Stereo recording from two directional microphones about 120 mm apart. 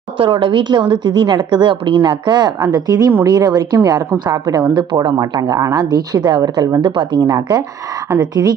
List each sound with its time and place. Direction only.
0.2 s a woman's voice: 45° right (ahead or behind)